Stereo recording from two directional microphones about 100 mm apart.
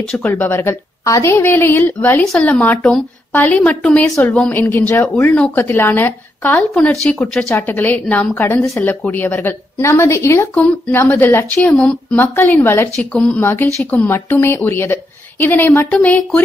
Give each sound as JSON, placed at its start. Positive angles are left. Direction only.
{"t": 0.0, "sound": "a woman's voice", "side_deg": 10}
{"t": 0.3, "sound": "a woman's voice", "side_deg": 20}
{"t": 4.1, "sound": "a woman's voice", "side_deg": 20}
{"t": 6.8, "sound": "a woman's voice", "side_deg": 10}
{"t": 10.5, "sound": "a woman's voice", "side_deg": 20}
{"t": 12.2, "sound": "a woman's voice", "side_deg": 20}